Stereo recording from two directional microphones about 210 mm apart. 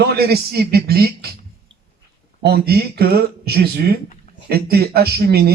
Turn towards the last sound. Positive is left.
turn(degrees=-50)  # may be behind; listen again after turning